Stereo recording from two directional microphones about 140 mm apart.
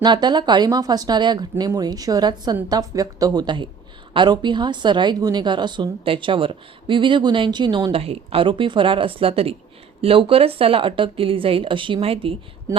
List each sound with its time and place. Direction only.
0.0 s a woman's voice: 30° right (ahead or behind)